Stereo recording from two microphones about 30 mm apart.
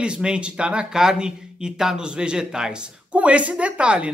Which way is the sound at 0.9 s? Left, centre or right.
Right.